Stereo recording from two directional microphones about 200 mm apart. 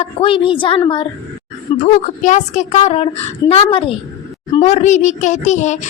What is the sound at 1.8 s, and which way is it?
Speech, 40° left (ahead or behind).